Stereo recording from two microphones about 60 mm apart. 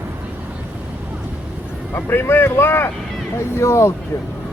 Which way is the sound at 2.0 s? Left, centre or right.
Left.